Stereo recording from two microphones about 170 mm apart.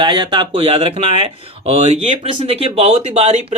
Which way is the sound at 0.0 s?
25° right (ahead or behind).